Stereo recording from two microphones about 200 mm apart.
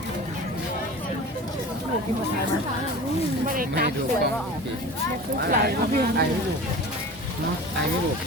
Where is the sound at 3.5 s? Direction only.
40° right (ahead or behind).